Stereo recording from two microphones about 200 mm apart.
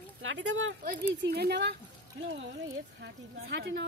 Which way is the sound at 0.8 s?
50° right (ahead or behind).